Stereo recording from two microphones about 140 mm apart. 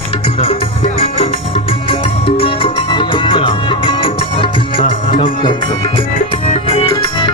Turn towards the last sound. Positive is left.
turn(degrees=40)  # may be behind; listen again after turning